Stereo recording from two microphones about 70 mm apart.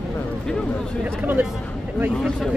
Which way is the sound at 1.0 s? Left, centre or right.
Right.